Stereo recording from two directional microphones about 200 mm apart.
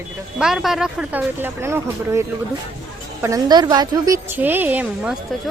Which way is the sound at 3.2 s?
20° right (ahead or behind).